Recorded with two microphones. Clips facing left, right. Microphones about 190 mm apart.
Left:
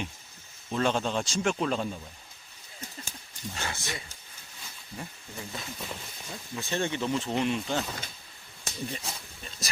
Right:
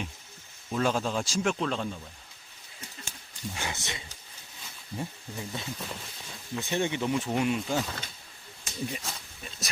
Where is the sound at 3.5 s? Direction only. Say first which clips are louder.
Left 1 dB; 15° right (ahead or behind).